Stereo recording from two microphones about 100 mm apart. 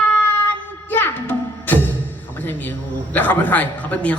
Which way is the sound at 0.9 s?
20° left (ahead or behind).